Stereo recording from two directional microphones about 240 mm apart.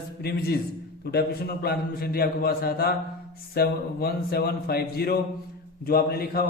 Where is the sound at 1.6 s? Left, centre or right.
Left.